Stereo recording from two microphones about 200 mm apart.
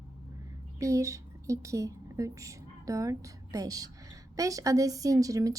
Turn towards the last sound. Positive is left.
turn(degrees=-15)  # may be behind; listen again after turning